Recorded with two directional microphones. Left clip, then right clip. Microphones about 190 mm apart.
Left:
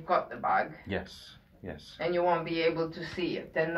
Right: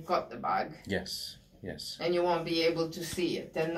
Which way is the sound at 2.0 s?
Centre (ahead or behind).